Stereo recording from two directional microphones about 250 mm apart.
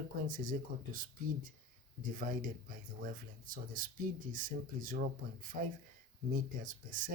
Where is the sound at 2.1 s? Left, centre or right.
Right.